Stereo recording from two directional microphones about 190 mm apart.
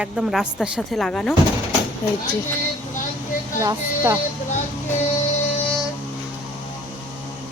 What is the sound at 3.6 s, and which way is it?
Speech, 15° right (ahead or behind).